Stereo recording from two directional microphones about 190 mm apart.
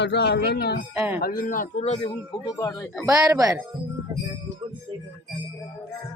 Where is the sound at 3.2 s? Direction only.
20° right (ahead or behind).